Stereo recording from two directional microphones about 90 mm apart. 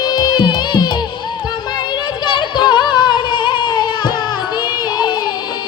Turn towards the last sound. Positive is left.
turn(degrees=55)  # may be behind; listen again after turning